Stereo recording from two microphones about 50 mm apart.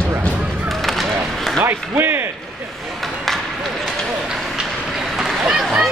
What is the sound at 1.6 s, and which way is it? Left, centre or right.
Speech, right.